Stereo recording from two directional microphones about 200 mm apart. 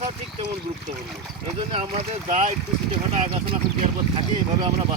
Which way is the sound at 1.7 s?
30° right (ahead or behind).